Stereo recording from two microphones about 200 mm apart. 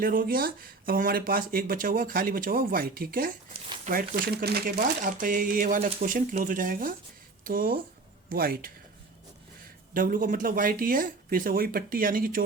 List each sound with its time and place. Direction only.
0.0 s speech: 45° right (ahead or behind)
9.9 s speech: 45° right (ahead or behind)